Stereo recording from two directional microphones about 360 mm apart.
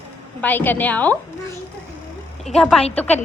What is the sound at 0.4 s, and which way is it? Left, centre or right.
Speech, centre.